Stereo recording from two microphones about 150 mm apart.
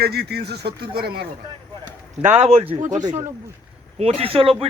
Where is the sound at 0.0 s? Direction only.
90° right.